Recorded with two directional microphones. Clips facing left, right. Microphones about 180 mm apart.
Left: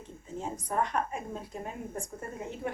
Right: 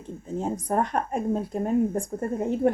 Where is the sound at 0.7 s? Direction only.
50° right (ahead or behind).